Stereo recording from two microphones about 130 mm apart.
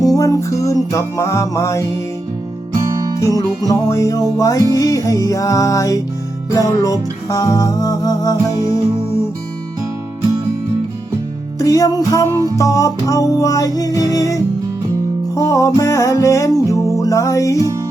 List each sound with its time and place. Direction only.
0.0 s music: 25° left (ahead or behind)
3.2 s music: 25° left (ahead or behind)
11.6 s music: 25° left (ahead or behind)
12.3 s music: 25° right (ahead or behind)
12.5 s music: 25° left (ahead or behind)
17.6 s music: 25° right (ahead or behind)